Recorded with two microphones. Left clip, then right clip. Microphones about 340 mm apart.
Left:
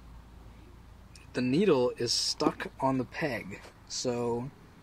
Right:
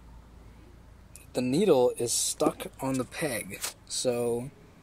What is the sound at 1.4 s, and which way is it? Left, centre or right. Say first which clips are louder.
Speech: right 3 dB; centre.